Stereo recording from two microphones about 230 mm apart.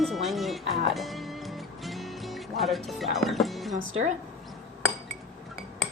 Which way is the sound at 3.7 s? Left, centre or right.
Right.